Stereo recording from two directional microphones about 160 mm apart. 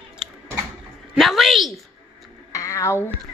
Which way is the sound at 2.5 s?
20° left (ahead or behind).